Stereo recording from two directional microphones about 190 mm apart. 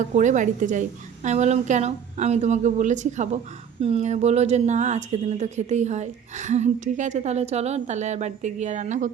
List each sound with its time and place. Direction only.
0.0 s a woman's voice: 40° right (ahead or behind)